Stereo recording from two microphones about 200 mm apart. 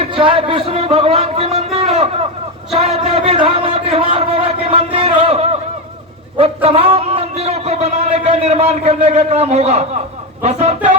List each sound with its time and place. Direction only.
0.0 s speech: 25° right (ahead or behind)
2.7 s a sound: 30° right (ahead or behind)
10.4 s speech: 35° right (ahead or behind)